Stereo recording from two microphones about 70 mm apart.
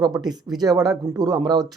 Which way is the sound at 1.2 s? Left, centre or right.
Right.